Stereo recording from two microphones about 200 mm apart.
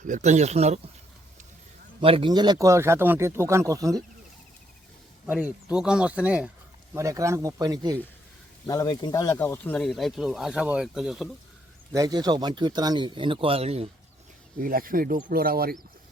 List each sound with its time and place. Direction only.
0.1 s speech: 35° right (ahead or behind)
2.0 s speech: 25° right (ahead or behind)
5.2 s speech: 5° right (ahead or behind)
8.6 s speech: 20° left (ahead or behind); by 11.3 s 5° right (ahead or behind)
11.9 s a man's voice: 20° right (ahead or behind)
14.6 s speech: 45° right (ahead or behind)